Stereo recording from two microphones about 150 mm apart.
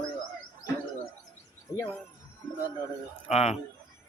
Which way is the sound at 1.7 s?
25° left (ahead or behind).